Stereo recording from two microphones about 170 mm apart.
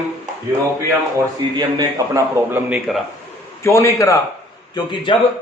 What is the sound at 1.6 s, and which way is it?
A man's voice, 20° right (ahead or behind).